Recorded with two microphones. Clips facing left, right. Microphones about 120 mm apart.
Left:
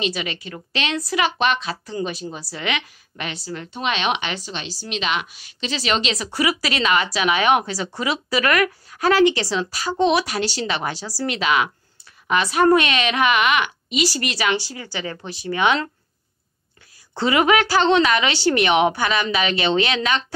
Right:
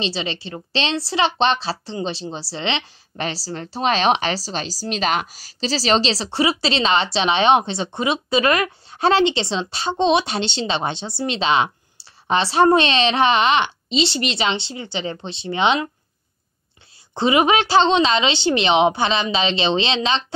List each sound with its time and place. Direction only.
0.0 s a woman's voice: 30° right (ahead or behind)
17.1 s a woman's voice: 20° right (ahead or behind)